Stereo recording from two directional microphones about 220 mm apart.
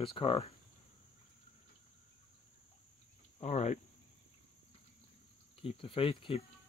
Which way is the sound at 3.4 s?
30° left (ahead or behind).